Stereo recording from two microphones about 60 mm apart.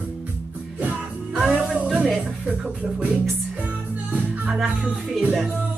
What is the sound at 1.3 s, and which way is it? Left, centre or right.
Music, centre.